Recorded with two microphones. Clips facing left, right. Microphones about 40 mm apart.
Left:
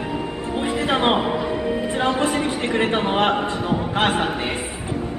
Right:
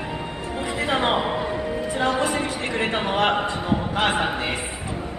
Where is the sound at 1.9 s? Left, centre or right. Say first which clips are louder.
Even; left.